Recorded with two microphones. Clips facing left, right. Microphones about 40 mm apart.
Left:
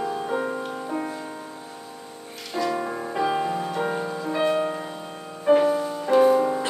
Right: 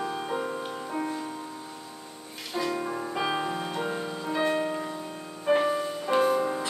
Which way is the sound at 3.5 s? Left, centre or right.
Centre.